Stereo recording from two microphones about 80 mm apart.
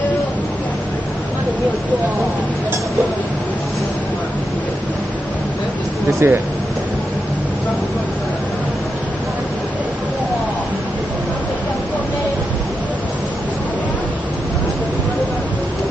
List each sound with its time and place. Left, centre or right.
6.1 s speech: right